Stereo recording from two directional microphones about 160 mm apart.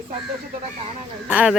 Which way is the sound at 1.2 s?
10° right (ahead or behind).